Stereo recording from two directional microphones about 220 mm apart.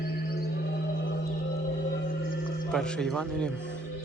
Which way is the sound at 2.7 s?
5° left (ahead or behind).